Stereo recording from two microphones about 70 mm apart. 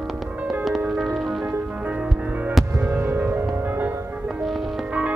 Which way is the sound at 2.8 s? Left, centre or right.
Right.